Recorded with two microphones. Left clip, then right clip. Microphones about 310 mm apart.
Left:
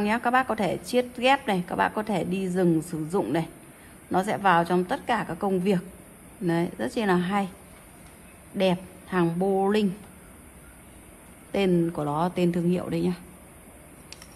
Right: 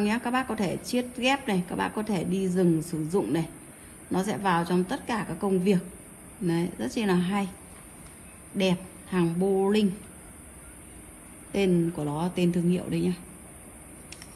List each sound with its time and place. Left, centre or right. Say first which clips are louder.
0.0 s a woman's voice: left 5 dB; centre
8.5 s a woman's voice: left 3 dB; centre
11.5 s a woman's voice: left 2 dB; centre